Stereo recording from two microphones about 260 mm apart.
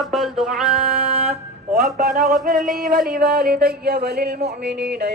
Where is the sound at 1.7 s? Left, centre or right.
Right.